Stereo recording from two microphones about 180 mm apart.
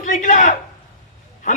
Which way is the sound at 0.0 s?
45° left (ahead or behind).